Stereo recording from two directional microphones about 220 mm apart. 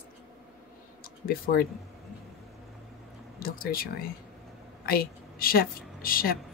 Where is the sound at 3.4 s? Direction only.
40° left (ahead or behind).